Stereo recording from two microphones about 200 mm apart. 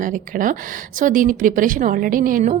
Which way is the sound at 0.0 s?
40° right (ahead or behind).